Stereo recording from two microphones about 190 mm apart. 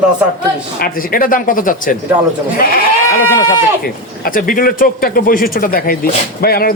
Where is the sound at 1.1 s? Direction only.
45° left (ahead or behind).